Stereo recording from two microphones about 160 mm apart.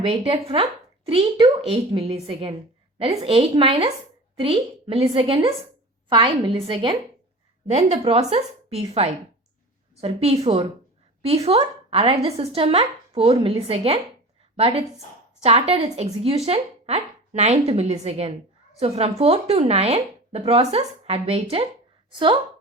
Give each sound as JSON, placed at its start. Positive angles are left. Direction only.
{"t": 0.0, "sound": "speech", "side_deg": -35}
{"t": 7.7, "sound": "a woman's voice", "side_deg": -45}